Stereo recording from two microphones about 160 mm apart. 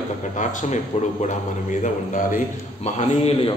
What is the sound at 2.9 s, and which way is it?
Speech, 40° left (ahead or behind).